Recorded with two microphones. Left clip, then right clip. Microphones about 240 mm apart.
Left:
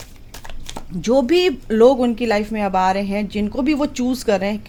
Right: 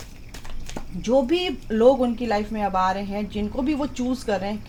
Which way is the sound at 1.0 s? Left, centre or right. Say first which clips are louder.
Left 5 dB; left.